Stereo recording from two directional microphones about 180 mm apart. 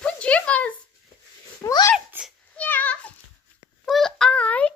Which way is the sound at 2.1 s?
10° right (ahead or behind).